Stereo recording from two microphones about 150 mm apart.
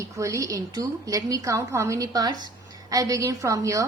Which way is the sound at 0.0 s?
20° right (ahead or behind).